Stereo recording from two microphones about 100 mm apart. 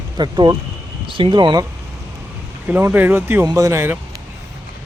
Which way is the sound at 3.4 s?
35° right (ahead or behind).